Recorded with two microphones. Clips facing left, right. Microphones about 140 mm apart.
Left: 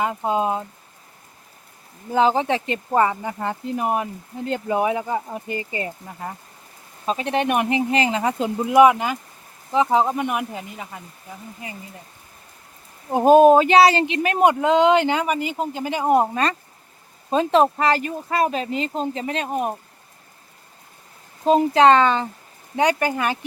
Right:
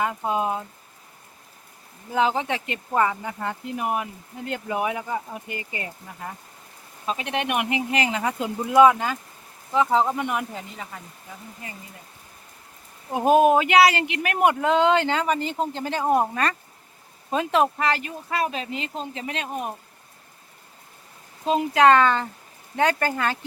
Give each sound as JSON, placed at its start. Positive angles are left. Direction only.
{"t": 0.0, "sound": "speech", "side_deg": 20}
{"t": 2.1, "sound": "speech", "side_deg": 35}
{"t": 7.0, "sound": "speech", "side_deg": 35}
{"t": 13.1, "sound": "speech", "side_deg": 30}
{"t": 21.7, "sound": "speech", "side_deg": 25}